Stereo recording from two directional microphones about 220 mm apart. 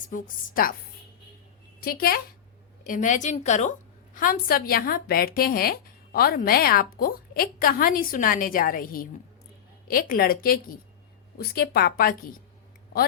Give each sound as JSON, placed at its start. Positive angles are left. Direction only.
{"t": 0.1, "sound": "a woman's voice", "side_deg": 40}
{"t": 1.8, "sound": "a woman's voice", "side_deg": 40}